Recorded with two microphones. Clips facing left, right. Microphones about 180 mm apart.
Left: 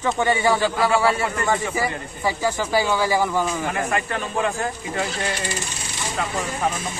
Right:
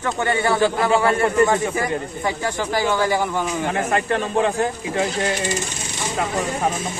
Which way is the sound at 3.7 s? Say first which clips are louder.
Right 4 dB; 25° right (ahead or behind).